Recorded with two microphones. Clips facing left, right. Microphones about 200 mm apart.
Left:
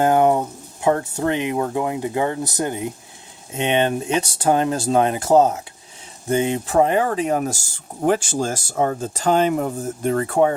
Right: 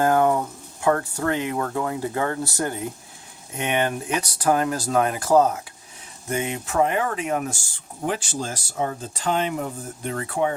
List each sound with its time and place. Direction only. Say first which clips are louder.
0.0 s speech: left 3 dB; 20° left (ahead or behind); by 7.6 s 35° left (ahead or behind)
8.0 s speech: left 7 dB; 45° left (ahead or behind)